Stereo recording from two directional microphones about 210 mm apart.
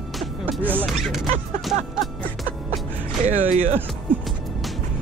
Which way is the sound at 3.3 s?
35° right (ahead or behind).